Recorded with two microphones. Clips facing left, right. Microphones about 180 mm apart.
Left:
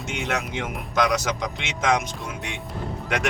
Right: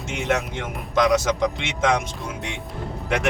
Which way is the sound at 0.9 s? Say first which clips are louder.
Right 4 dB; 25° right (ahead or behind).